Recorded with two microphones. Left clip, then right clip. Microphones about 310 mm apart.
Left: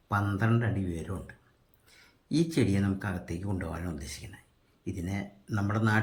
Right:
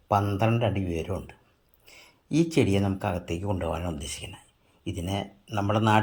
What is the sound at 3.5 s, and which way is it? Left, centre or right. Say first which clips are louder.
Speech: right 8 dB; right.